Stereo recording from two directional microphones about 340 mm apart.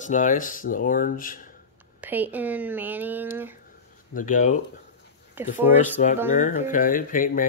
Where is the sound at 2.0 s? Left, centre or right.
Centre.